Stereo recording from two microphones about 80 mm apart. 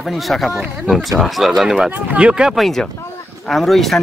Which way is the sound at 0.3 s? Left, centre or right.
Centre.